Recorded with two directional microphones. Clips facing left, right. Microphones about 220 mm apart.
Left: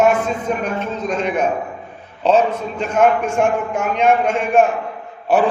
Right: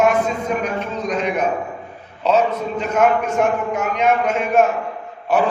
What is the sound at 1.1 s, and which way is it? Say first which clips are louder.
Speech: left 1 dB; 30° left (ahead or behind).